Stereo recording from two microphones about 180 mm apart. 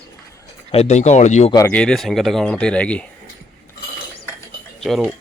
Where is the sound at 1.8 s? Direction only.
Centre (ahead or behind).